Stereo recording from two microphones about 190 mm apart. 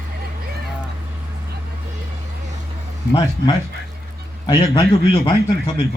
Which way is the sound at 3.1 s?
25° left (ahead or behind).